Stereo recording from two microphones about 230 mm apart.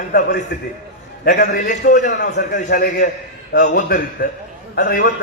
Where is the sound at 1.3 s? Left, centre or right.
Left.